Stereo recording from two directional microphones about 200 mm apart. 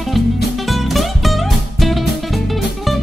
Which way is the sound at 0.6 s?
Centre (ahead or behind).